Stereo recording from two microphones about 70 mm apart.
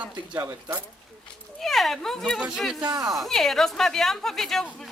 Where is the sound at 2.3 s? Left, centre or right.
Centre.